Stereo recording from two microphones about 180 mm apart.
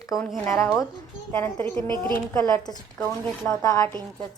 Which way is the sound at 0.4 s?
15° left (ahead or behind).